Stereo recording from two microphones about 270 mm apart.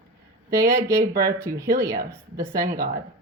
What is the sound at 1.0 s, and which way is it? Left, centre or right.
Speech, right.